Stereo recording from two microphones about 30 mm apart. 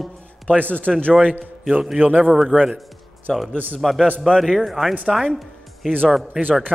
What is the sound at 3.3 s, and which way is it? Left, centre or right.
Speech, centre.